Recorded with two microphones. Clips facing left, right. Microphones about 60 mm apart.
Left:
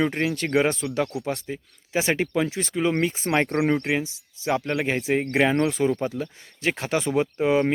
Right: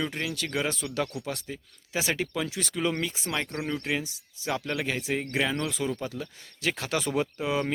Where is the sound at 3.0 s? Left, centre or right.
Left.